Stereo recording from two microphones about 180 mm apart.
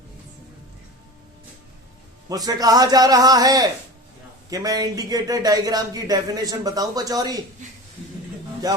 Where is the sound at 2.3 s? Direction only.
20° right (ahead or behind).